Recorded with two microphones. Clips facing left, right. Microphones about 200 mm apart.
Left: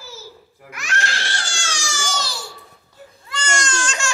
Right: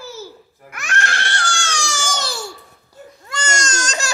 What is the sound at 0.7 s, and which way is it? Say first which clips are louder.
Baby cry: right 2 dB; 55° right (ahead or behind).